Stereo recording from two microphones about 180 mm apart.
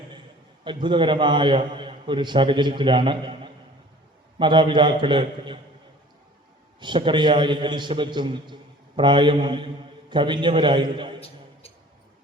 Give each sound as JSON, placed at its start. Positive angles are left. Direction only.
{"t": 0.6, "sound": "a man's voice", "side_deg": -25}
{"t": 6.7, "sound": "a man's voice", "side_deg": -25}